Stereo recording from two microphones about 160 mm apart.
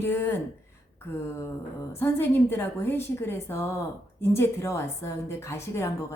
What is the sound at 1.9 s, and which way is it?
A woman's voice, 15° left (ahead or behind).